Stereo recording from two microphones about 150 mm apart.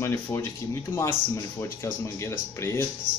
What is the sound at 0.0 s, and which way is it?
Speech, 15° left (ahead or behind).